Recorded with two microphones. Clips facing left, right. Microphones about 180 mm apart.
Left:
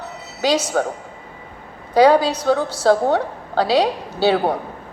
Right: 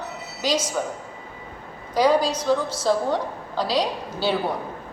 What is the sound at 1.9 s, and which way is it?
A woman's voice, 65° left (ahead or behind).